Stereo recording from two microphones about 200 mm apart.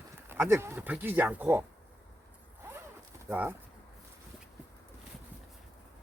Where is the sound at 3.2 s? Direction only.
10° right (ahead or behind).